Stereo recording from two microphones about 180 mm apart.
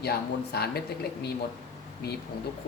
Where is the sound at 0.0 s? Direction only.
65° left (ahead or behind).